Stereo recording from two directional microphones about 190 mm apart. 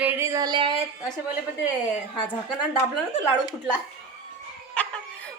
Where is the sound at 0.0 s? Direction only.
10° right (ahead or behind).